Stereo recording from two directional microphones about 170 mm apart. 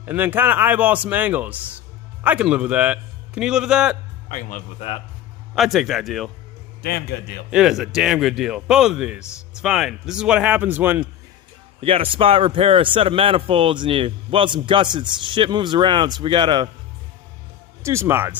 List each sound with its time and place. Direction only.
0.0 s a man's voice: 10° right (ahead or behind)
4.3 s a man's voice: 50° left (ahead or behind)
5.5 s speech: centre (ahead or behind)
6.8 s a man's voice: 70° left (ahead or behind)
7.5 s speech: centre (ahead or behind)
11.8 s speech: 35° right (ahead or behind)
17.8 s a man's voice: 15° right (ahead or behind)